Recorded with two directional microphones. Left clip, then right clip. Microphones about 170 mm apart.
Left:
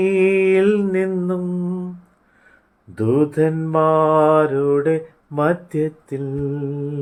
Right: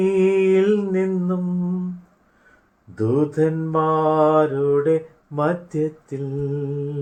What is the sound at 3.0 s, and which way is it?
Mantra, 50° left (ahead or behind).